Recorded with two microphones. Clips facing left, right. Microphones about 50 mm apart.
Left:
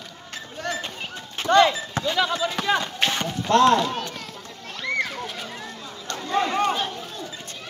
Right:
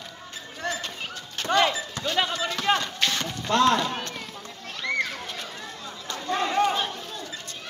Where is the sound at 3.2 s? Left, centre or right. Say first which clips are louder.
Left 5 dB; centre.